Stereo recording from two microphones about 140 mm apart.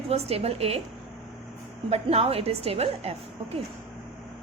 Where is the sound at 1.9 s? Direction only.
45° right (ahead or behind).